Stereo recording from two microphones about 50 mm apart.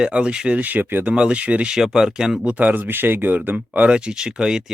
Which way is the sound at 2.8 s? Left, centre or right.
Right.